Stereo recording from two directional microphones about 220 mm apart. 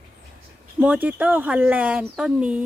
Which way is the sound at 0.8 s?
5° right (ahead or behind).